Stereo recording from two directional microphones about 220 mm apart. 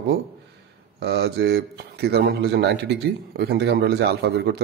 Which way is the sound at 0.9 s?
45° right (ahead or behind).